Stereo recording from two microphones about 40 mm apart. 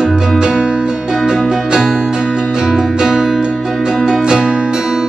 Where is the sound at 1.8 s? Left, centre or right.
Centre.